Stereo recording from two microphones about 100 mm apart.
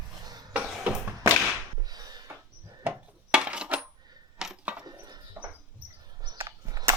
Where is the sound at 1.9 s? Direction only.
45° right (ahead or behind).